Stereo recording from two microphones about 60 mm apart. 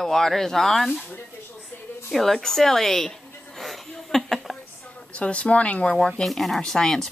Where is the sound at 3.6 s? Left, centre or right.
Centre.